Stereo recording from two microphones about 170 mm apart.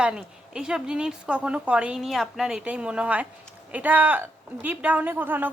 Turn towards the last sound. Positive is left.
turn(degrees=-10)  # may be behind; listen again after turning